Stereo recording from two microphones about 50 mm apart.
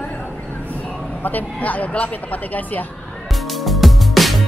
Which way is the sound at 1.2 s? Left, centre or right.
Left.